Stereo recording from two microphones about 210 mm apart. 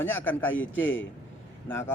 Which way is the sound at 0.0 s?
10° left (ahead or behind).